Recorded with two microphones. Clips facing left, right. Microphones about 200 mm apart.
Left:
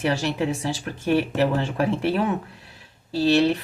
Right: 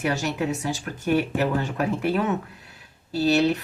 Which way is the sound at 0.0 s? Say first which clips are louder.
Left 2 dB; 30° left (ahead or behind).